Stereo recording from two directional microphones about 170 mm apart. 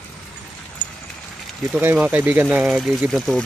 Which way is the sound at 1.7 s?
10° right (ahead or behind).